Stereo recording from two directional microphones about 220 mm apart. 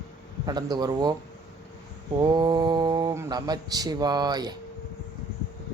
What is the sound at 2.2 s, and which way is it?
Speech, 20° right (ahead or behind).